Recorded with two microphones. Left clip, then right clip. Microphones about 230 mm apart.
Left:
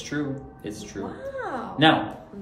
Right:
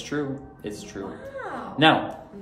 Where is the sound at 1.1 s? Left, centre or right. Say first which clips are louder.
Left 4 dB; centre.